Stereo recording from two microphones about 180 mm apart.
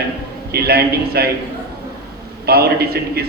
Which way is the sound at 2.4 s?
60° right (ahead or behind).